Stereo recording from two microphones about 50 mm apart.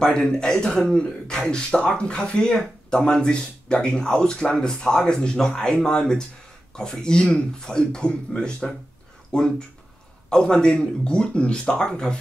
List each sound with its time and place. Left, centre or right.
0.0 s speech: centre